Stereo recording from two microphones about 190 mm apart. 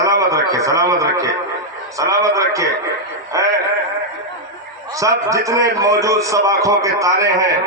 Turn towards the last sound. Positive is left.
turn(degrees=-15)  # may be behind; listen again after turning